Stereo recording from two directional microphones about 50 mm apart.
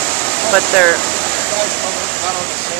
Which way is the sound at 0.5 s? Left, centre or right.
Left.